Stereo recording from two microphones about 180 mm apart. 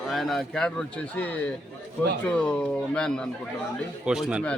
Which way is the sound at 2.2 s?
5° left (ahead or behind).